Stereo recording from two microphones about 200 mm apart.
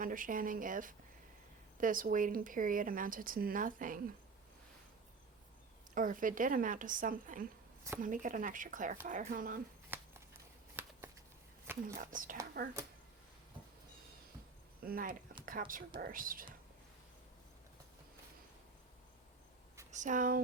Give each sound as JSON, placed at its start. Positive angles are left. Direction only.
{"t": 0.0, "sound": "speech", "side_deg": -45}
{"t": 5.9, "sound": "speech", "side_deg": -40}
{"t": 10.8, "sound": "a sound", "side_deg": -10}
{"t": 11.9, "sound": "speech", "side_deg": -40}
{"t": 14.8, "sound": "speech", "side_deg": -45}
{"t": 19.9, "sound": "speech", "side_deg": -40}